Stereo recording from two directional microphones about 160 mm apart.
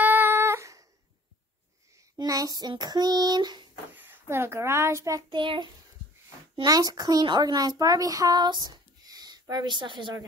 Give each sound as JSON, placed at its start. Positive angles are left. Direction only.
{"t": 0.0, "sound": "a sound", "side_deg": -10}
{"t": 2.0, "sound": "speech", "side_deg": -20}
{"t": 3.9, "sound": "a child's voice", "side_deg": -10}